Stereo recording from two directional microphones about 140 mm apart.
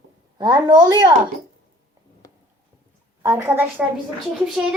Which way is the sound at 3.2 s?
15° right (ahead or behind).